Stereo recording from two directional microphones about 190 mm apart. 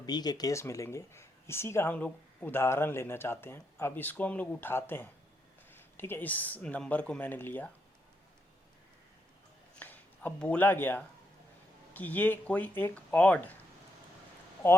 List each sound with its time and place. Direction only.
0.0 s speech: 20° left (ahead or behind)
9.7 s a sound: 10° left (ahead or behind)
11.9 s speech: 10° left (ahead or behind)